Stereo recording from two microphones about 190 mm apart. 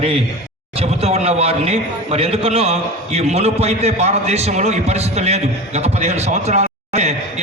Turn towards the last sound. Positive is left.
turn(degrees=-35)  # may be behind; listen again after turning